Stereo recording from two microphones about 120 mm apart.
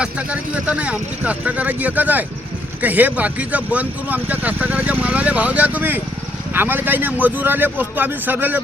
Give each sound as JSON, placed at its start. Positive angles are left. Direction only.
{"t": 0.0, "sound": "speech", "side_deg": -10}